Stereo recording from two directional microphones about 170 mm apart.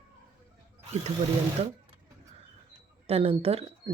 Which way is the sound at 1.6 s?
40° right (ahead or behind).